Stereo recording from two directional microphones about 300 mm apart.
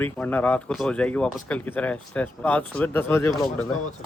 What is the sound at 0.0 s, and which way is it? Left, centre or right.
Speech, centre.